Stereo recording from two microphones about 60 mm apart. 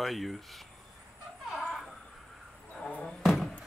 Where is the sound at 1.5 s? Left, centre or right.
Centre.